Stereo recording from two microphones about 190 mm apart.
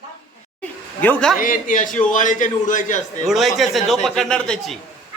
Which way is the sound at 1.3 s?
45° left (ahead or behind).